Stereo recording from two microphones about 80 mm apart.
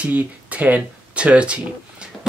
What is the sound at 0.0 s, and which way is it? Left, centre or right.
Speech, centre.